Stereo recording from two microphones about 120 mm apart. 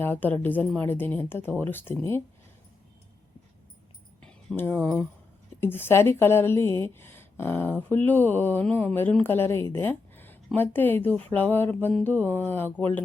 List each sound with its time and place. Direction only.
0.0 s speech: 15° left (ahead or behind)
4.2 s a sound: 5° left (ahead or behind)
5.5 s a woman's voice: 20° left (ahead or behind)